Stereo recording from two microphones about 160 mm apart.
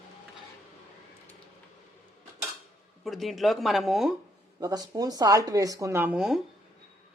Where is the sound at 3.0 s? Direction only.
Centre (ahead or behind).